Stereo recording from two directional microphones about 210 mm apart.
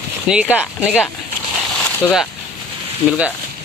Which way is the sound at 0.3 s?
5° right (ahead or behind).